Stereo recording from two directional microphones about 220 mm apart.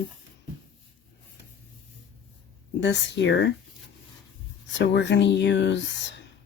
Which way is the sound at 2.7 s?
50° left (ahead or behind).